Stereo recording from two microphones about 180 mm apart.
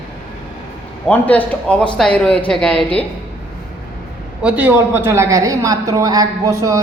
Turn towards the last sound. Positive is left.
turn(degrees=-15)  # may be behind; listen again after turning